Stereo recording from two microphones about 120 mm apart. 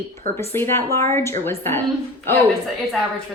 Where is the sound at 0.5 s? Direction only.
20° left (ahead or behind).